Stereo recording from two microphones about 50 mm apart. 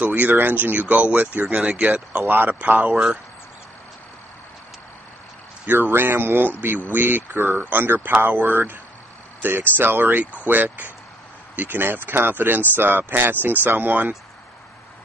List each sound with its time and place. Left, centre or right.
0.0 s speech: right
2.3 s speech: right
5.7 s speech: right